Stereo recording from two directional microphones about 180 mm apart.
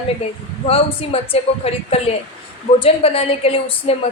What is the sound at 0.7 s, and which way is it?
A woman's voice, 30° left (ahead or behind).